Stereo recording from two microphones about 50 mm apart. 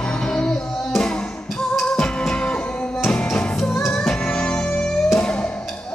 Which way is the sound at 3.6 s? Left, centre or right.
Centre.